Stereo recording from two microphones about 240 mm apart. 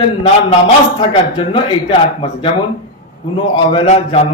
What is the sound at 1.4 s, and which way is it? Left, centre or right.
A man's voice, left.